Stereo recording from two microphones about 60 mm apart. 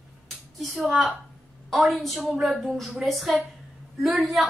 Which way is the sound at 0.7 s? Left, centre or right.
Centre.